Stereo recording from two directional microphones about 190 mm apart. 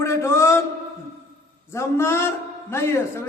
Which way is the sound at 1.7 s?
15° left (ahead or behind).